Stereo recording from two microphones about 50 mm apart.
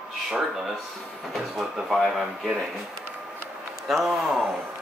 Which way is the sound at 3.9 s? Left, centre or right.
Centre.